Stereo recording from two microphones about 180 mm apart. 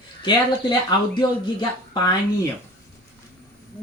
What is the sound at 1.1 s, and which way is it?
Speech, 25° left (ahead or behind).